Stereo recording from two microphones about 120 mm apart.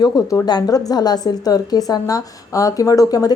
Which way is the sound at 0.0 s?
25° left (ahead or behind).